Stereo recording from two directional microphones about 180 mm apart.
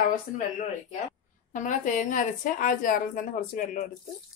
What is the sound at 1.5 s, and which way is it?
A woman's voice, 45° left (ahead or behind).